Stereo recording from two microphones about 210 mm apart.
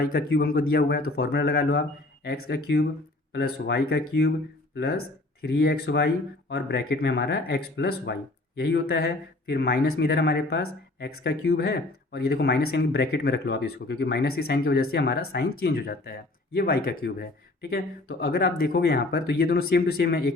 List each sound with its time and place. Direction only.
0.0 s speech: 45° left (ahead or behind)